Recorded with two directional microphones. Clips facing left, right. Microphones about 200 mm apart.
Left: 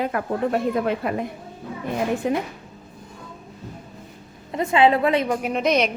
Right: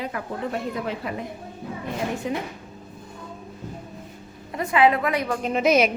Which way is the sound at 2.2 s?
55° left (ahead or behind).